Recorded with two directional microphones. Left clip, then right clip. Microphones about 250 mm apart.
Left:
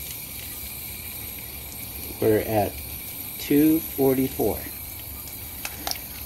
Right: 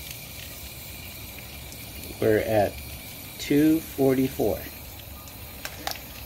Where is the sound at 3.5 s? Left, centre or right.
Centre.